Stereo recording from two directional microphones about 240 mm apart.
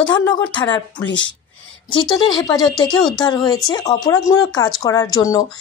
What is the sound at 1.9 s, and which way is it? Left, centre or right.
Speech, centre.